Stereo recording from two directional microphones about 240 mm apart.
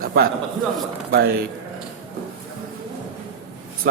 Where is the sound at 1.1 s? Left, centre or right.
Right.